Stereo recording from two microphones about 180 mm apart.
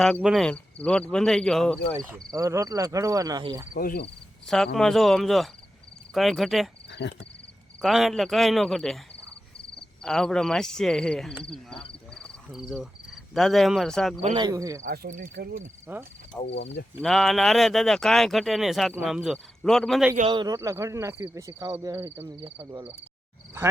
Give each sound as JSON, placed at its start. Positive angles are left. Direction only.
{"t": 0.0, "sound": "speech", "side_deg": 0}
{"t": 2.0, "sound": "speech", "side_deg": -20}
{"t": 3.8, "sound": "speech", "side_deg": 60}
{"t": 4.4, "sound": "speech", "side_deg": 0}
{"t": 7.0, "sound": "speech", "side_deg": 70}
{"t": 7.8, "sound": "speech", "side_deg": 0}
{"t": 10.0, "sound": "speech", "side_deg": 0}
{"t": 14.2, "sound": "speech", "side_deg": -30}
{"t": 14.8, "sound": "cricket", "side_deg": -50}
{"t": 15.9, "sound": "speech", "side_deg": -10}
{"t": 16.3, "sound": "speech", "side_deg": 10}
{"t": 17.0, "sound": "speech", "side_deg": 0}
{"t": 20.2, "sound": "speech", "side_deg": -25}
{"t": 22.4, "sound": "cricket", "side_deg": -30}